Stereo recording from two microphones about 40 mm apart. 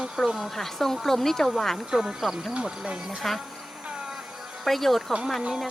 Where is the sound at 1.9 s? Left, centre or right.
Centre.